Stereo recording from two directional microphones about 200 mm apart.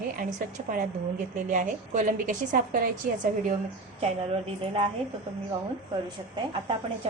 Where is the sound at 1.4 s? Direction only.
40° right (ahead or behind).